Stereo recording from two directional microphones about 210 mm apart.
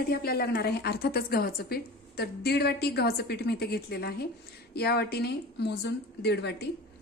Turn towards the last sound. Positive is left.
turn(degrees=55)  # may be behind; listen again after turning